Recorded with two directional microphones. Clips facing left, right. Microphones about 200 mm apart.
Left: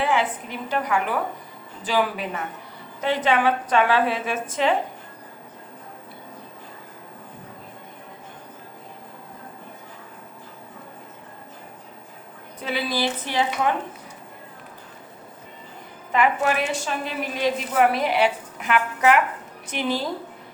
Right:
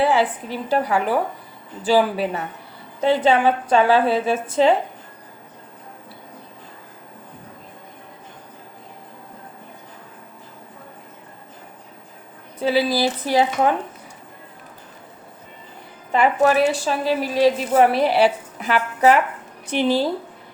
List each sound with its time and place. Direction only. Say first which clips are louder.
0.0 s a woman's voice: right 4 dB; 35° right (ahead or behind)
12.5 s a woman's voice: right 7 dB; 35° right (ahead or behind)
16.1 s a woman's voice: right 5 dB; 35° right (ahead or behind)